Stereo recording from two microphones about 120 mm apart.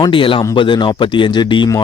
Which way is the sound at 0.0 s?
45° left (ahead or behind).